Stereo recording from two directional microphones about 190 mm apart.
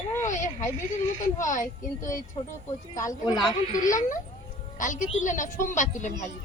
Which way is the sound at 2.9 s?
15° left (ahead or behind).